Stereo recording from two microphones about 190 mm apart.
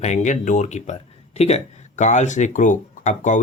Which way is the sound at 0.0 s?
40° left (ahead or behind).